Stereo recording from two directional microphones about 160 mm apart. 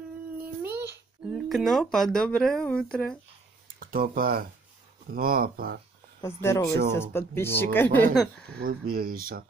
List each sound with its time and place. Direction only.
0.4 s a sound: 10° right (ahead or behind)
1.2 s a sound: centre (ahead or behind)
2.1 s speech: 5° left (ahead or behind)
3.8 s speech: 65° right (ahead or behind)
6.2 s speech: 15° left (ahead or behind)
8.8 s speech: 65° right (ahead or behind)